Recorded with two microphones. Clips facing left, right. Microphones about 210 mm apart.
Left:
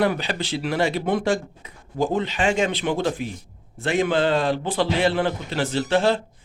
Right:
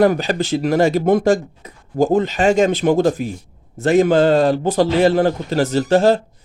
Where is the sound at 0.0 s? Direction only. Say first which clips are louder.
Right 7 dB; 45° right (ahead or behind).